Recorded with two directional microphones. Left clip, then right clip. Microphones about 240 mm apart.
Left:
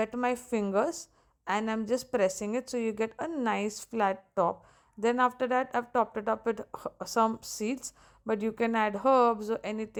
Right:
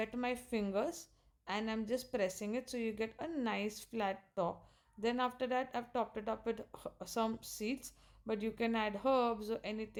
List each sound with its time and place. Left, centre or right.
0.0 s speech: centre